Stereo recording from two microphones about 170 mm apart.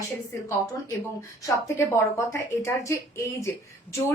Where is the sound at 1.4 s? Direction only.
15° left (ahead or behind).